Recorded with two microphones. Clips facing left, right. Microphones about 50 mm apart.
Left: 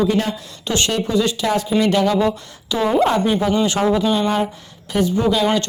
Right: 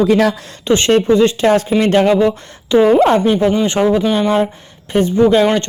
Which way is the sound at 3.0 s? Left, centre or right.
Right.